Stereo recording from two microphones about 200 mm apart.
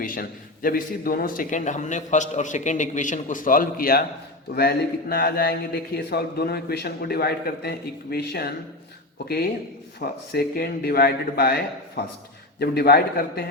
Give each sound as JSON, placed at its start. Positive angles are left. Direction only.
{"t": 0.0, "sound": "a man's voice", "side_deg": 45}
{"t": 10.0, "sound": "speech", "side_deg": 50}